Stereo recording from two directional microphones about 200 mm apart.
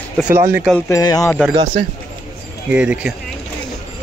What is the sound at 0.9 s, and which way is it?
Speech, 20° left (ahead or behind).